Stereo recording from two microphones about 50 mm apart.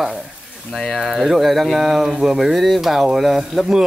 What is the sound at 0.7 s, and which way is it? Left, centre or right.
Speech, centre.